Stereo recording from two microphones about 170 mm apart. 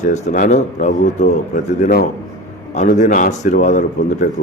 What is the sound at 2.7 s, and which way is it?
Speech, 45° left (ahead or behind).